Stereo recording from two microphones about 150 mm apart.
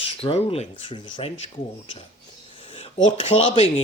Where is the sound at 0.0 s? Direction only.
40° left (ahead or behind).